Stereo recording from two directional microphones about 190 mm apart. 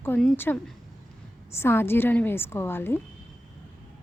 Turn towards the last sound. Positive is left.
turn(degrees=10)  # may be behind; listen again after turning